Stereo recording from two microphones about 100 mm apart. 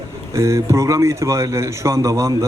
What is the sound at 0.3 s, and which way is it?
A man's voice, 30° right (ahead or behind).